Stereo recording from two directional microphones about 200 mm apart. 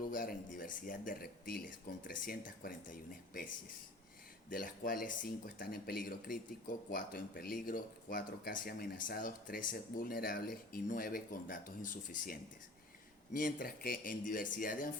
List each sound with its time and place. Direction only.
0.1 s speech: 45° left (ahead or behind)